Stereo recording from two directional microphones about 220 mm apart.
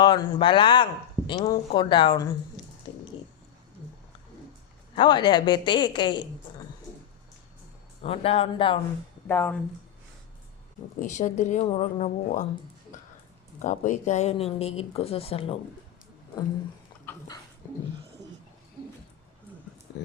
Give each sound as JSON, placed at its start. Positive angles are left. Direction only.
{"t": 0.0, "sound": "speech", "side_deg": 20}
{"t": 2.8, "sound": "a sound", "side_deg": 25}
{"t": 4.9, "sound": "speech", "side_deg": 20}
{"t": 8.0, "sound": "speech", "side_deg": 25}
{"t": 9.2, "sound": "speech", "side_deg": 10}
{"t": 11.0, "sound": "speech", "side_deg": 35}
{"t": 13.6, "sound": "speech", "side_deg": 35}
{"t": 17.1, "sound": "dog", "side_deg": 15}